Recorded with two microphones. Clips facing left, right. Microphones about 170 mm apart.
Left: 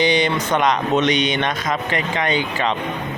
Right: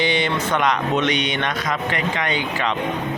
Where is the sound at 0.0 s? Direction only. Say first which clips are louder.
Left 3 dB; 20° left (ahead or behind).